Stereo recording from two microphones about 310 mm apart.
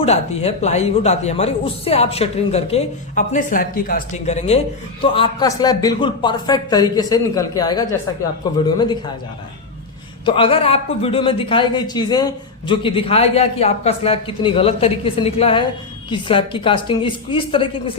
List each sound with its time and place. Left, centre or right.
0.0 s a man's voice: left
10.2 s a man's voice: centre